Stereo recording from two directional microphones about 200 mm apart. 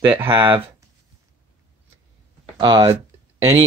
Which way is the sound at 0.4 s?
25° right (ahead or behind).